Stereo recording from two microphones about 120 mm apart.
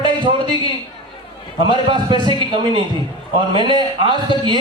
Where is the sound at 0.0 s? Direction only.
40° right (ahead or behind).